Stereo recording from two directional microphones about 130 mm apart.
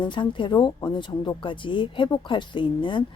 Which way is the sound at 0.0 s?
40° left (ahead or behind).